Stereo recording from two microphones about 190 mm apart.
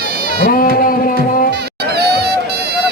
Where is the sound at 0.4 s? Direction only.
50° left (ahead or behind).